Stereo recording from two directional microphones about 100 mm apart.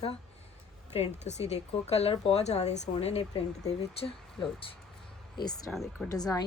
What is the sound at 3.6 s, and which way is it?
Speech, 80° left.